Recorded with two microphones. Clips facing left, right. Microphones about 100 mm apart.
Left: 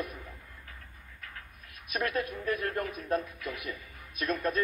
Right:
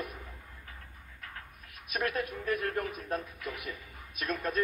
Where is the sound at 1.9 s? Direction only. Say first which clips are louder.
Left 1 dB; 5° right (ahead or behind).